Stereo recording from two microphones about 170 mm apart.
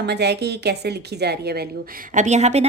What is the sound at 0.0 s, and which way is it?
A woman's voice, 75° right (ahead or behind).